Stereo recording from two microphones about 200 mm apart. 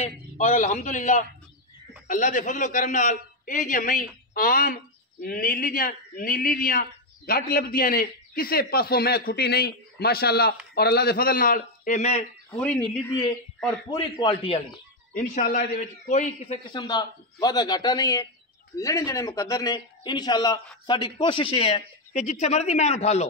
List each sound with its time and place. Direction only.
0.0 s a man's voice: 40° left (ahead or behind)
12.5 s a man's voice: 5° left (ahead or behind)
13.8 s a man's voice: 25° left (ahead or behind)
15.1 s a man's voice: 40° left (ahead or behind)
16.7 s a man's voice: 20° left (ahead or behind)